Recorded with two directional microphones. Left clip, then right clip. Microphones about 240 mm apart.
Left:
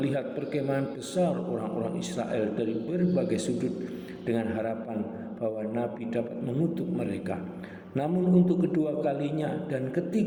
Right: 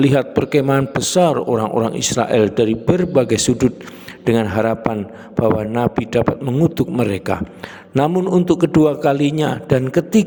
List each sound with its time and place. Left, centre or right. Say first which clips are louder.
0.0 s a man's voice: right 15 dB; right